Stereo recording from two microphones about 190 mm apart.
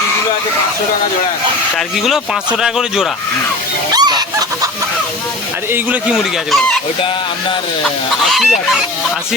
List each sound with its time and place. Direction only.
2.0 s speech: 5° right (ahead or behind)
3.9 s chicken: 20° right (ahead or behind)
8.3 s speech: centre (ahead or behind)